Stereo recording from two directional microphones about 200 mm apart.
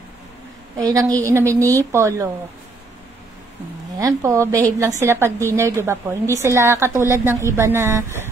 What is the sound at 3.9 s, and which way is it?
Speech, 15° right (ahead or behind).